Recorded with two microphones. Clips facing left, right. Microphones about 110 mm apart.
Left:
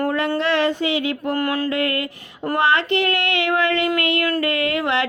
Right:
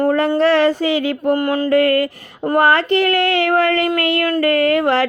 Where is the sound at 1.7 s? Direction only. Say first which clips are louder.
Right 8 dB; 45° right (ahead or behind).